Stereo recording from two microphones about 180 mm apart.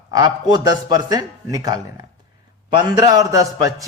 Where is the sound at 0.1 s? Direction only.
20° right (ahead or behind).